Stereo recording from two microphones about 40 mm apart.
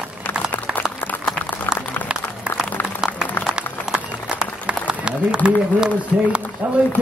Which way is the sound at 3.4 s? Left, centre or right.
Right.